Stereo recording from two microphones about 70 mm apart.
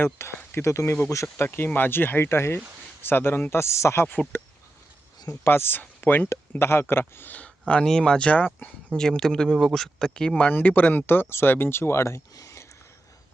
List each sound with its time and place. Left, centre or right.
0.0 s speech: left
1.5 s speech: left
5.3 s speech: left
6.5 s speech: left
7.0 s speech: left
7.7 s speech: centre
9.0 s speech: centre
10.3 s speech: left
12.4 s a sound: left